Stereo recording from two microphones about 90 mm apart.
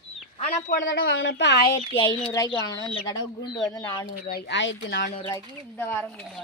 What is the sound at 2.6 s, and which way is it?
Speech, 45° left (ahead or behind).